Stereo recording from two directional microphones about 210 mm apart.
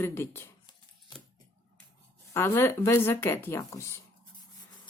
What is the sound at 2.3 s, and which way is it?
Speech, 10° left (ahead or behind).